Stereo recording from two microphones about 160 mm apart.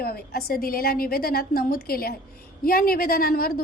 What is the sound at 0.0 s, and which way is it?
A woman's voice, 70° left (ahead or behind).